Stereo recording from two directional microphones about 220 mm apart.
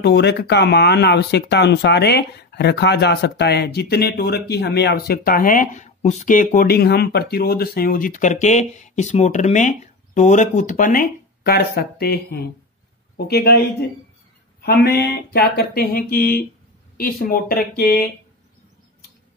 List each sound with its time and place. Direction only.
0.0 s speech: 50° left (ahead or behind)